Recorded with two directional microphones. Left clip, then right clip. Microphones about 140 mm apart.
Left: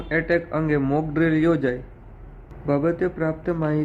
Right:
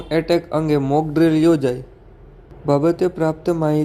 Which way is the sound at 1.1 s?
25° right (ahead or behind).